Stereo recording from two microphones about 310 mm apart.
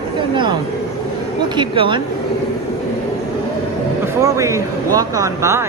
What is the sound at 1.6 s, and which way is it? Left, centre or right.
Speech, centre.